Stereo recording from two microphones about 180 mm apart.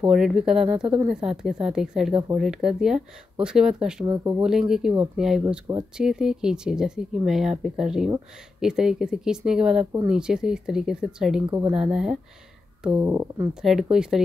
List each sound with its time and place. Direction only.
0.0 s speech: 5° right (ahead or behind)
4.0 s speech: 20° right (ahead or behind)
4.4 s speech: 5° right (ahead or behind)
12.9 s speech: 20° right (ahead or behind)
13.6 s speech: 5° right (ahead or behind)